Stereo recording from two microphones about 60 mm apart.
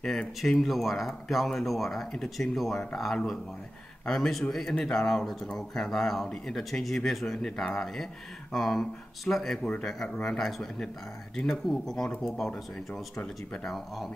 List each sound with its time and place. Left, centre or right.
0.4 s speech: centre
4.1 s speech: centre
10.0 s speech: centre
10.3 s speech: centre